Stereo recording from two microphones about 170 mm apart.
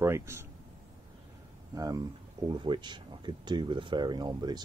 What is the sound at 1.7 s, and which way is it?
Speech, 20° right (ahead or behind).